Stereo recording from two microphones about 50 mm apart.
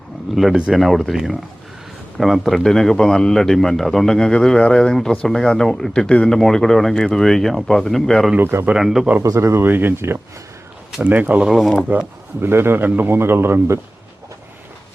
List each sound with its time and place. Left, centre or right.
0.4 s a man's voice: centre
8.4 s a man's voice: right
8.7 s speech: centre
9.2 s speech: right
9.6 s a man's voice: right
11.4 s speech: centre
11.9 s speech: right
12.4 s a man's voice: right